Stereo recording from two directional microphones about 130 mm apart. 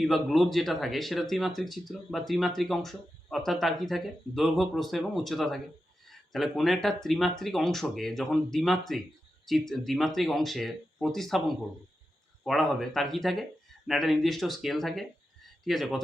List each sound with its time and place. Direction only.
0.0 s speech: centre (ahead or behind)